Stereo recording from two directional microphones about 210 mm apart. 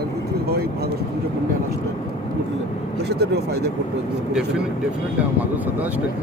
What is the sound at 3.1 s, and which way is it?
Speech, 50° right (ahead or behind).